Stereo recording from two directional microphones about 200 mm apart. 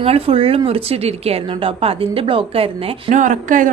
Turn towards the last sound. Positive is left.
turn(degrees=-40)  # may be behind; listen again after turning